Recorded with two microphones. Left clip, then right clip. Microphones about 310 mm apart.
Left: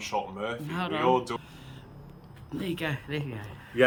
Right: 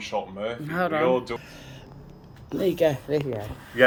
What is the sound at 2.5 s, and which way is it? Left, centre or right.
Speech, centre.